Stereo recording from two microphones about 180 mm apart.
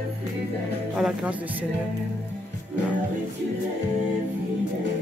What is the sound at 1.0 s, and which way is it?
Speech, 5° right (ahead or behind).